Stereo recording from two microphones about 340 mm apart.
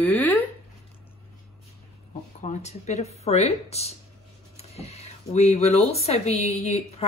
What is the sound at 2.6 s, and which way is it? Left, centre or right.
A woman's voice, centre.